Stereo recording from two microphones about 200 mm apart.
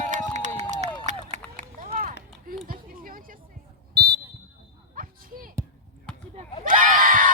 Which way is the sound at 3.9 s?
20° right (ahead or behind).